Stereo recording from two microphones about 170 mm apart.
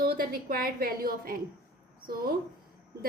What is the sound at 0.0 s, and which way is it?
A woman's voice, 60° right (ahead or behind).